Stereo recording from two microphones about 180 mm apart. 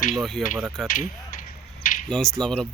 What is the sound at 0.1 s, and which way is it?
Speech, centre (ahead or behind).